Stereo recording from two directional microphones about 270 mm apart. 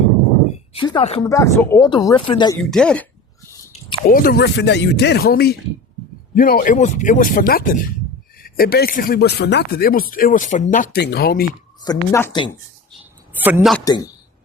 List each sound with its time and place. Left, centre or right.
0.7 s speech: centre
2.6 s a man's voice: centre
3.7 s a sound: centre
4.1 s speech: left
11.8 s speech: centre
13.3 s a man's voice: centre
13.8 s speech: centre